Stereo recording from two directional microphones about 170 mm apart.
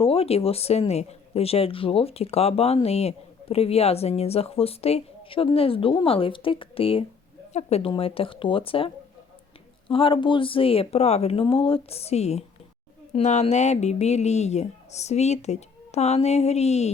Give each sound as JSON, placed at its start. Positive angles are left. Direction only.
{"t": 0.0, "sound": "speech", "side_deg": 35}
{"t": 9.9, "sound": "speech", "side_deg": 30}